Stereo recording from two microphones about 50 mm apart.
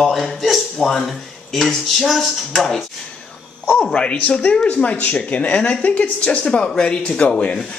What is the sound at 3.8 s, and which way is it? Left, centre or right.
Speech, left.